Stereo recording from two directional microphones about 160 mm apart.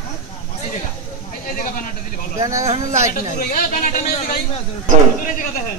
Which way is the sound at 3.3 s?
55° left (ahead or behind).